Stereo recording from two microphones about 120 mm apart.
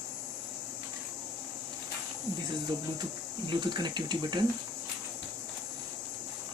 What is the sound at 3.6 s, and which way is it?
Speech, 40° right (ahead or behind).